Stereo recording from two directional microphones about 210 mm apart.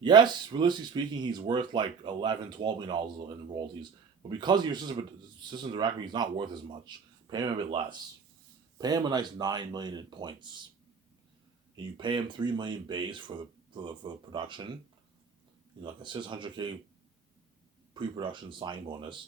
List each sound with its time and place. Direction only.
0.0 s speech: 20° right (ahead or behind)
11.9 s speech: 20° right (ahead or behind)
15.8 s speech: 20° right (ahead or behind)
17.9 s speech: 20° right (ahead or behind)